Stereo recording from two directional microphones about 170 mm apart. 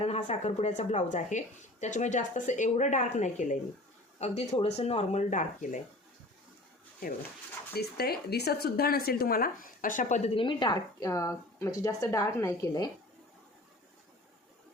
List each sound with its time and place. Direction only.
0.0 s a woman's voice: 40° left (ahead or behind)
7.7 s speech: 70° left (ahead or behind); by 10.2 s 50° left (ahead or behind)
10.2 s a woman's voice: 30° left (ahead or behind)